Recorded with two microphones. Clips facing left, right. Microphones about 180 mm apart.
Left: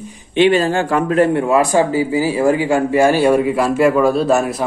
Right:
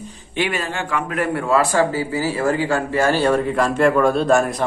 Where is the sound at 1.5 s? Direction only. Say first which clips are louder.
Left 3 dB; 15° left (ahead or behind).